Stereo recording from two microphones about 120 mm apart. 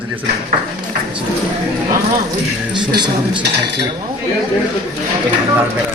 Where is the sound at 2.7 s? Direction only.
40° right (ahead or behind).